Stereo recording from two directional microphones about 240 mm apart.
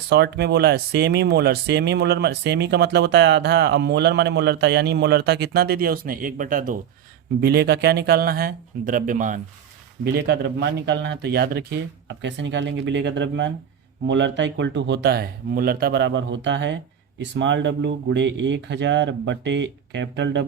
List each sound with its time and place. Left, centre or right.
0.1 s speech: right
10.0 s speech: right